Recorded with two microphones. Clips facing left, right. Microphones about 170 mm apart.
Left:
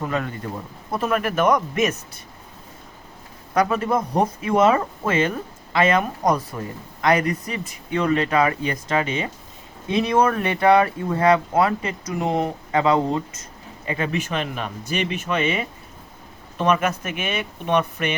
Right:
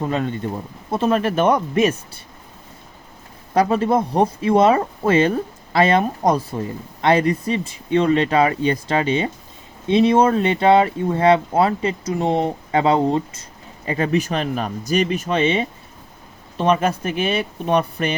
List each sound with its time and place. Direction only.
0.0 s speech: 25° right (ahead or behind)
3.5 s speech: 30° right (ahead or behind)